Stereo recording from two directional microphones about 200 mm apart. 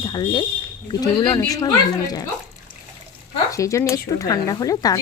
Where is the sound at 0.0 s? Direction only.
20° left (ahead or behind).